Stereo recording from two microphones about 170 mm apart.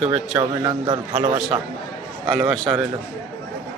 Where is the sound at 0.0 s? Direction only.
5° right (ahead or behind).